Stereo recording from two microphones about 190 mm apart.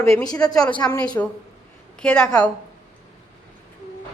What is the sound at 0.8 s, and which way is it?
Speech, 15° left (ahead or behind).